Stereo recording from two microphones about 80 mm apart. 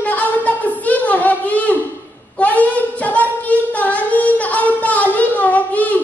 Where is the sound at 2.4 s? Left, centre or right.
Centre.